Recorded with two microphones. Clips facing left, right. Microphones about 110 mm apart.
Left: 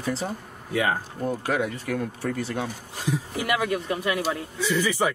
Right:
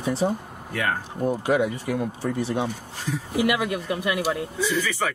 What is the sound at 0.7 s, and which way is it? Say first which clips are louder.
Speech: left 2 dB; 15° left (ahead or behind).